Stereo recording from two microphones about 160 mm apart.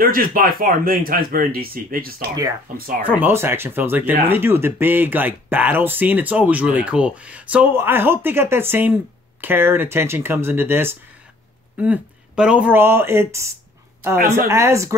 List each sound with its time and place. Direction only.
0.0 s speech: 65° right (ahead or behind)
3.2 s speech: 15° right (ahead or behind)
14.5 s speech: 20° right (ahead or behind)